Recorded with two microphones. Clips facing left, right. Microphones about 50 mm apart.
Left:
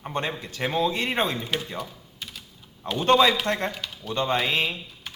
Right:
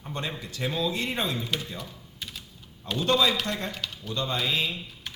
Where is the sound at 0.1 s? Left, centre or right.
Left.